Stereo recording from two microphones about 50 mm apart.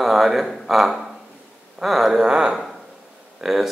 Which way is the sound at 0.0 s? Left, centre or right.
Centre.